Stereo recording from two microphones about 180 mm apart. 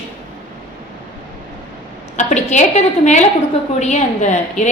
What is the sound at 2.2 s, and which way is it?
A woman's voice, 40° left (ahead or behind).